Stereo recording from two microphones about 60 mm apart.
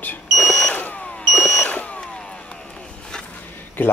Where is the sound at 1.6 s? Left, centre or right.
Left.